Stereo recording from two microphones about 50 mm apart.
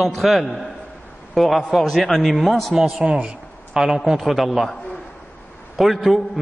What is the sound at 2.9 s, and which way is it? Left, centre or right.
Speech, centre.